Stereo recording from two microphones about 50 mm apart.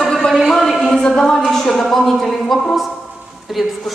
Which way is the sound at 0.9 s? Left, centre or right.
Centre.